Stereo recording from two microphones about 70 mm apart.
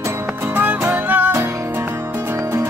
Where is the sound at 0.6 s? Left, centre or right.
Right.